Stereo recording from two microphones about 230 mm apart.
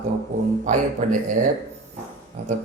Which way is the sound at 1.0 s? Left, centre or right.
Right.